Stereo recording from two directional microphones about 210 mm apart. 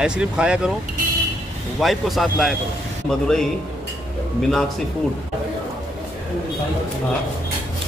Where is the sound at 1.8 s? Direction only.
Centre (ahead or behind).